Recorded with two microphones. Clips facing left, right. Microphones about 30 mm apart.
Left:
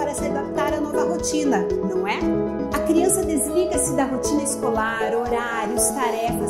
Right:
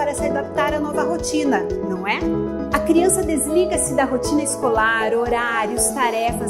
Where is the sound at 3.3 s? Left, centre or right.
Right.